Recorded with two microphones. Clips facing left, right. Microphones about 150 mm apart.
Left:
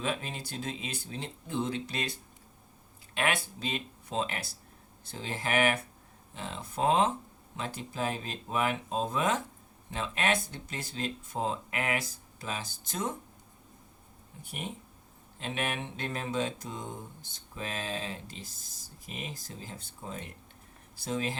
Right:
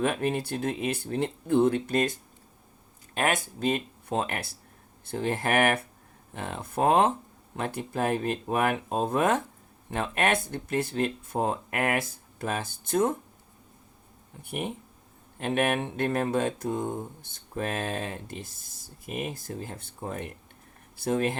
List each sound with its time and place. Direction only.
0.0 s speech: 55° right (ahead or behind)
3.2 s speech: 45° right (ahead or behind)
14.4 s speech: 55° right (ahead or behind)